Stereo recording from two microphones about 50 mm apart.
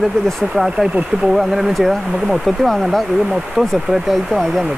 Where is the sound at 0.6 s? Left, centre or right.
Centre.